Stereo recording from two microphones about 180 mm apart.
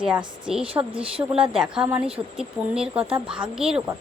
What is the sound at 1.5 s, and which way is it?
Speech, 5° right (ahead or behind).